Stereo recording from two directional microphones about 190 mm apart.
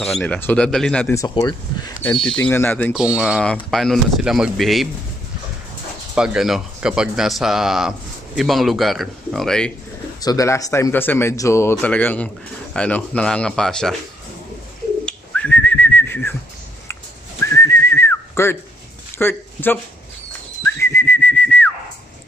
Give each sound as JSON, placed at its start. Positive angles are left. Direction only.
{"t": 0.2, "sound": "speech", "side_deg": 10}
{"t": 1.1, "sound": "speech", "side_deg": 20}
{"t": 2.0, "sound": "speech", "side_deg": 5}
{"t": 2.9, "sound": "speech", "side_deg": -5}
{"t": 6.1, "sound": "speech", "side_deg": -5}
{"t": 10.2, "sound": "speech", "side_deg": 15}
{"t": 15.0, "sound": "whistling", "side_deg": 5}
{"t": 17.4, "sound": "whistling", "side_deg": 15}
{"t": 19.1, "sound": "speech", "side_deg": 10}
{"t": 20.6, "sound": "whistling", "side_deg": 10}